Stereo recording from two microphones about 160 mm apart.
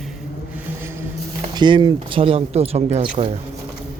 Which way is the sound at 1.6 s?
30° right (ahead or behind).